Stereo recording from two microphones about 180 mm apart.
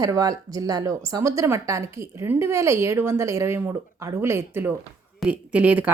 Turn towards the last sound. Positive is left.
turn(degrees=-10)  # may be behind; listen again after turning